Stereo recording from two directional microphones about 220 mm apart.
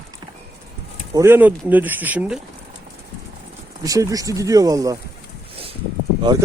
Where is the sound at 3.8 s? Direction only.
15° right (ahead or behind).